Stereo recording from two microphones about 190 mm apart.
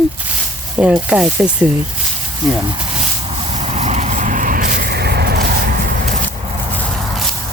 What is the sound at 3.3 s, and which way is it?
Vehicle, 35° right (ahead or behind).